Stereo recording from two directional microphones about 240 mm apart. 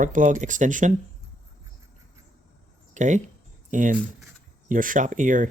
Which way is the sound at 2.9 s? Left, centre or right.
Right.